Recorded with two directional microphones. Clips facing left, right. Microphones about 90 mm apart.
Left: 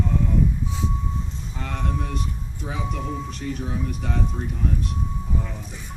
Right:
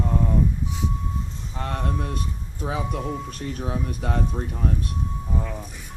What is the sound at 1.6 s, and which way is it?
Speech, 50° right (ahead or behind).